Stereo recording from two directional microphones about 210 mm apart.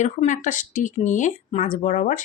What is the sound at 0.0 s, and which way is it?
Speech, 35° left (ahead or behind).